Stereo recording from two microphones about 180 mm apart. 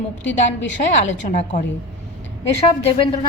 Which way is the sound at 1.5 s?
45° left (ahead or behind).